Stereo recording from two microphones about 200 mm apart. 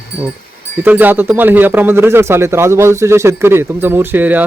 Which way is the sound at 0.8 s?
10° right (ahead or behind).